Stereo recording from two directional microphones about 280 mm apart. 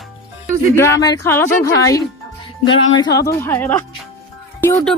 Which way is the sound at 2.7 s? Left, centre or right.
Left.